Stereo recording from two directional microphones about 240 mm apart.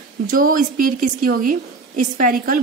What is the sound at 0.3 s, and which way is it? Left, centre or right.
A woman's voice, right.